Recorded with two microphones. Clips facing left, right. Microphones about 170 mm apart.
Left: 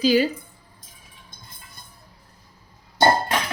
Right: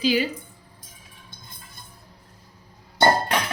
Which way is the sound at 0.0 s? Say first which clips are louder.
Left 4 dB; 40° left (ahead or behind).